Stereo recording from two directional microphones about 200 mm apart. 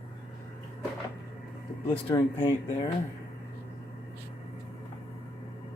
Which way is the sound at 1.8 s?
20° left (ahead or behind).